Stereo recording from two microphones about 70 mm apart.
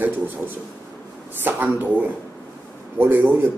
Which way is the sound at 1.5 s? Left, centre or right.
Right.